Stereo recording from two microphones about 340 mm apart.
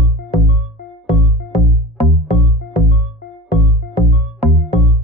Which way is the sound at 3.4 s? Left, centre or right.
Left.